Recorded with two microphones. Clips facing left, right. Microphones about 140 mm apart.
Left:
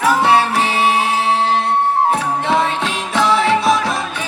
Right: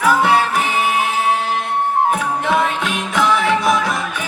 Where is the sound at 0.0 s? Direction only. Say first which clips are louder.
Left 1 dB; 30° left (ahead or behind).